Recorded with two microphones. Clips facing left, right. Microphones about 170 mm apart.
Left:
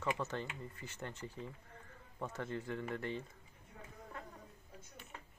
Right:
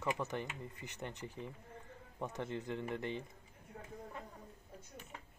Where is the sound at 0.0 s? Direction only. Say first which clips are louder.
Even; 15° right (ahead or behind).